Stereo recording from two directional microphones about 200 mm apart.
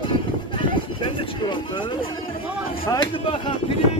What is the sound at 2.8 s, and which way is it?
Speech, 25° left (ahead or behind).